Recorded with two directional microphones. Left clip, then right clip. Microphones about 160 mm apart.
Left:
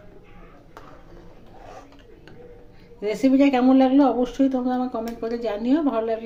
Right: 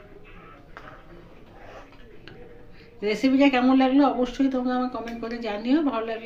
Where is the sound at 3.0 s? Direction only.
90° left.